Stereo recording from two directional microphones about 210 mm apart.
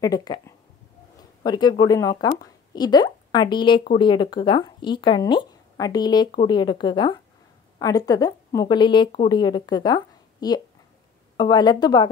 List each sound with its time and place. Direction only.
0.0 s a woman's voice: 20° left (ahead or behind)